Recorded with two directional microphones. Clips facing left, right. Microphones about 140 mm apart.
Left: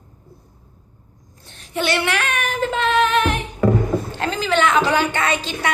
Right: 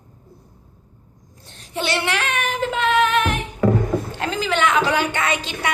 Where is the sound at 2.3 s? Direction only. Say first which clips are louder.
Left 1 dB; 20° right (ahead or behind); by 3.3 s 5° right (ahead or behind).